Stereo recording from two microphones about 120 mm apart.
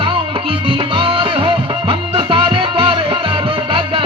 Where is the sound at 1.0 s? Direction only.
45° right (ahead or behind).